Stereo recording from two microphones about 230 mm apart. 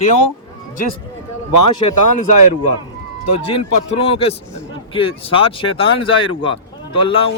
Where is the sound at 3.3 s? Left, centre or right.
Left.